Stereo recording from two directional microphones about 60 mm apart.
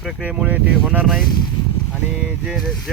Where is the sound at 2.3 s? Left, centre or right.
Centre.